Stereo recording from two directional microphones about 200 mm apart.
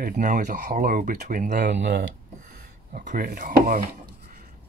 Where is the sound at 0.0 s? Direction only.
40° right (ahead or behind).